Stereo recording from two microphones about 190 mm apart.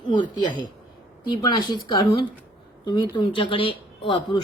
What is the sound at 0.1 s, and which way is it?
Speech, 25° left (ahead or behind).